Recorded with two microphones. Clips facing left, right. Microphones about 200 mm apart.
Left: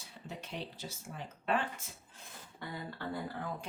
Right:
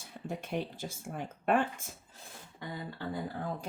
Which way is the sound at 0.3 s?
50° right (ahead or behind).